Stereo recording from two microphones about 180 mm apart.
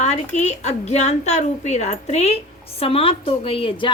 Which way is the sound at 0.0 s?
40° left (ahead or behind).